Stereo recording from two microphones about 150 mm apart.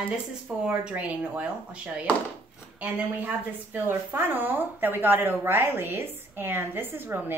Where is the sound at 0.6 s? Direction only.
10° right (ahead or behind).